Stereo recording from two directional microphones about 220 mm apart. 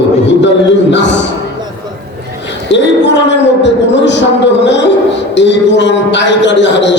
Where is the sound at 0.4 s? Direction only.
55° left (ahead or behind).